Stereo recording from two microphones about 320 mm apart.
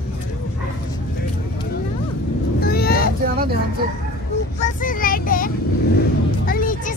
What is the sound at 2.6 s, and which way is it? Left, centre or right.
Vehicle, left.